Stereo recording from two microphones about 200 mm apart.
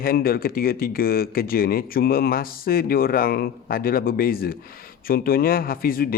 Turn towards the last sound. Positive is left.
turn(degrees=45)  # may be behind; listen again after turning